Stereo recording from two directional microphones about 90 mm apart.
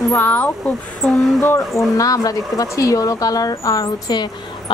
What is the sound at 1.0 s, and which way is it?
Speech, centre (ahead or behind).